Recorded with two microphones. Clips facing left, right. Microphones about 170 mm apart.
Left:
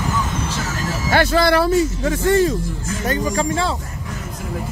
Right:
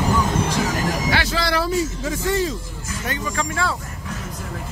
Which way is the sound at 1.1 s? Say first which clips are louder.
Left 7 dB; 50° left (ahead or behind).